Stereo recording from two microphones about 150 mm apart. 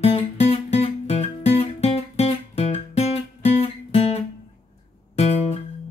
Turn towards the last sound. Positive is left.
turn(degrees=45)  # may be behind; listen again after turning